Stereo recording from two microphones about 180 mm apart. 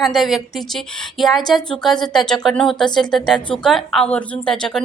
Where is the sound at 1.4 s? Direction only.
Centre (ahead or behind).